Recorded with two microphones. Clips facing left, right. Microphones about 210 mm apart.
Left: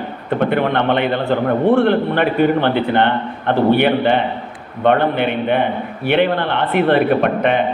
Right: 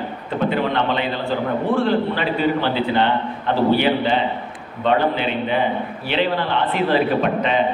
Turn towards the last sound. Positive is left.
turn(degrees=60)  # may be behind; listen again after turning